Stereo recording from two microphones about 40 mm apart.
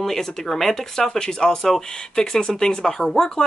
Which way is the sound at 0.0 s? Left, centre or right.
Centre.